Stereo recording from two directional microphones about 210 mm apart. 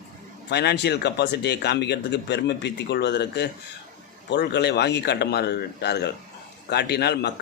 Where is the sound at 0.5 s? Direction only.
55° left (ahead or behind).